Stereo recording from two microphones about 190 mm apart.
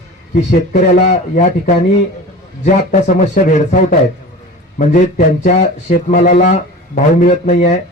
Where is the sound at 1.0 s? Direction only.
40° left (ahead or behind).